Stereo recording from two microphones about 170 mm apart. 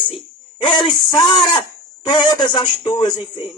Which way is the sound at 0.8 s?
25° left (ahead or behind).